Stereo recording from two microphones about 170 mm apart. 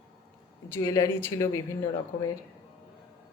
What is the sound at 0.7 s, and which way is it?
Speech, 20° left (ahead or behind).